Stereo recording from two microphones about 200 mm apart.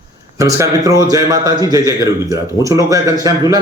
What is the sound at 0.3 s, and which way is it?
A man's voice, 15° right (ahead or behind).